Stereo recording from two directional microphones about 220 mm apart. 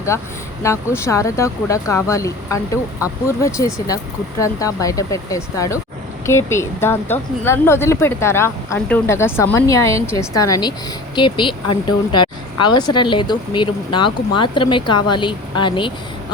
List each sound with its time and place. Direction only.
0.1 s speech: 10° left (ahead or behind)